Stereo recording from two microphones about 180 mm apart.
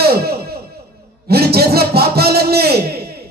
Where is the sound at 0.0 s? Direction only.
60° right (ahead or behind).